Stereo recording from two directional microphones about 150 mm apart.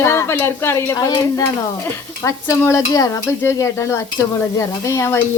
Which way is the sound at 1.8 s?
20° left (ahead or behind).